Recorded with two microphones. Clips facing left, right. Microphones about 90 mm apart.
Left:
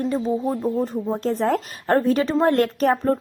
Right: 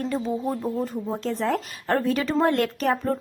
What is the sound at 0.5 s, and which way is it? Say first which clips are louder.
Speech: left 4 dB; 20° left (ahead or behind).